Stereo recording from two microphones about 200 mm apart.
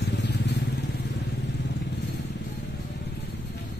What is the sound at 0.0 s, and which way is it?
Vehicle, 55° left (ahead or behind).